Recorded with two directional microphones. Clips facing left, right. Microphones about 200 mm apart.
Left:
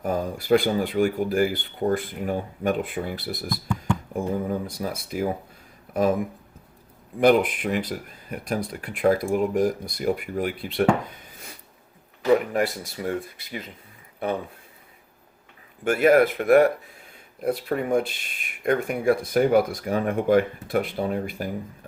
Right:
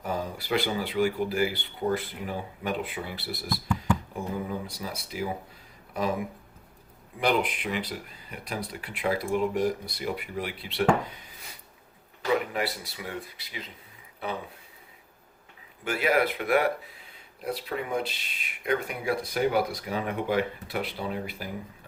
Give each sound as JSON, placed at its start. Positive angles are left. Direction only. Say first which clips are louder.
{"t": 0.0, "sound": "speech", "louder": "left 6 dB", "side_deg": 45}
{"t": 7.2, "sound": "speech", "louder": "left 8 dB", "side_deg": 50}
{"t": 12.3, "sound": "speech", "louder": "left 7 dB", "side_deg": 45}
{"t": 15.8, "sound": "speech", "louder": "left 8 dB", "side_deg": 50}